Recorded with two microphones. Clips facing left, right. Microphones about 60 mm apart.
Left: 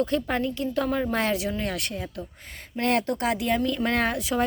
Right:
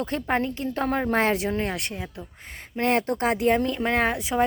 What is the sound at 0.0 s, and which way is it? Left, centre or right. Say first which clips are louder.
Speech: even; right.